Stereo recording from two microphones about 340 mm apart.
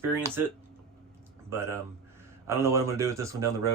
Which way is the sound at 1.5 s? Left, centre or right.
Centre.